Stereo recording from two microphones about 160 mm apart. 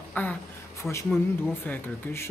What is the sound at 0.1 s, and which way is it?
Speech, 10° left (ahead or behind).